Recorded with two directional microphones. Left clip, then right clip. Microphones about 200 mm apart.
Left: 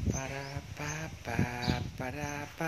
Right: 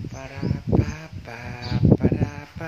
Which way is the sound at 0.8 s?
10° left (ahead or behind).